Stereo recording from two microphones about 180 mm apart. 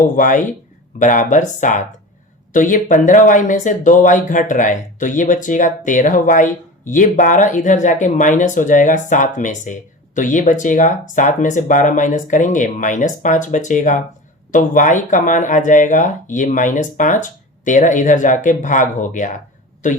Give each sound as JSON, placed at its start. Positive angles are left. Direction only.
{"t": 0.0, "sound": "speech", "side_deg": 45}